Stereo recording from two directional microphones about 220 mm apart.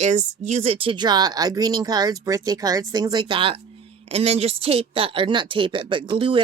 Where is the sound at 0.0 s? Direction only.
30° right (ahead or behind).